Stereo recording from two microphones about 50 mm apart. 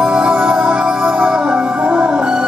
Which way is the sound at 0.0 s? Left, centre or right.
Right.